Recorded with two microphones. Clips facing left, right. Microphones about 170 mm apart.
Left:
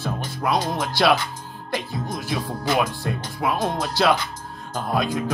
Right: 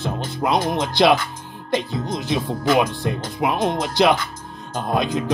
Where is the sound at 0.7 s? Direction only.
20° right (ahead or behind).